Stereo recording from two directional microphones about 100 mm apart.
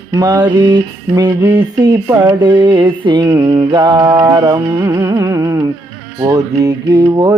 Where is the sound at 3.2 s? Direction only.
35° right (ahead or behind).